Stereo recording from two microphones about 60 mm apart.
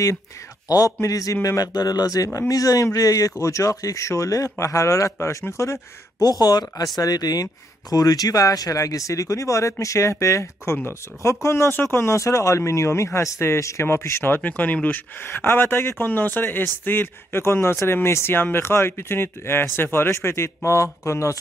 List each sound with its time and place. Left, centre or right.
0.7 s speech: left
13.8 s speech: left
14.2 s speech: left
15.2 s speech: left